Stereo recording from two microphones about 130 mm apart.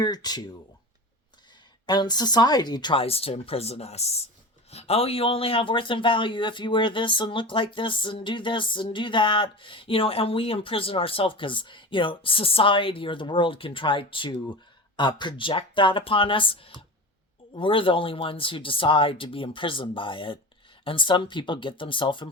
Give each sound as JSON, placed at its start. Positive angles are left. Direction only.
{"t": 0.0, "sound": "speech", "side_deg": 30}
{"t": 1.9, "sound": "speech", "side_deg": 35}